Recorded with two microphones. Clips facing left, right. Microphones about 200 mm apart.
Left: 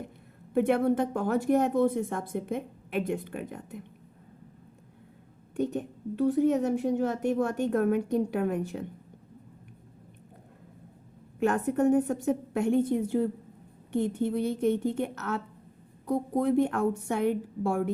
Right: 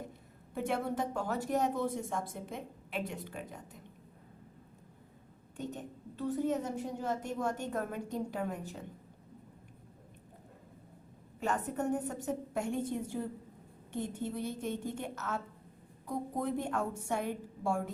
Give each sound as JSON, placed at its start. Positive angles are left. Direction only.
{"t": 0.5, "sound": "speech", "side_deg": 60}
{"t": 5.5, "sound": "speech", "side_deg": 65}
{"t": 11.3, "sound": "speech", "side_deg": 60}